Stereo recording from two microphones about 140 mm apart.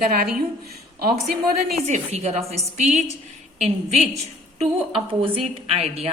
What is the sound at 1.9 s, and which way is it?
A woman's voice, 55° right (ahead or behind).